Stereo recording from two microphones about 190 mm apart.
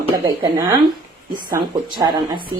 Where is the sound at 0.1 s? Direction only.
20° right (ahead or behind).